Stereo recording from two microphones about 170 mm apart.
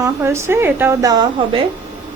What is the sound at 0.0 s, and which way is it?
A woman's voice, 15° right (ahead or behind).